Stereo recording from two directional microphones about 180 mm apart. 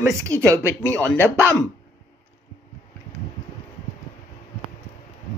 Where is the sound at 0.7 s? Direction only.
10° left (ahead or behind).